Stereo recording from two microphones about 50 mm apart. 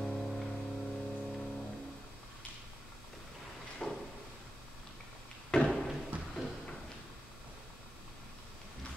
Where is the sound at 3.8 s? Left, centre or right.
Centre.